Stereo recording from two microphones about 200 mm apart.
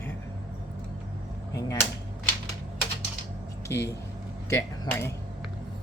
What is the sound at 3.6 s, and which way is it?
Speech, 15° left (ahead or behind).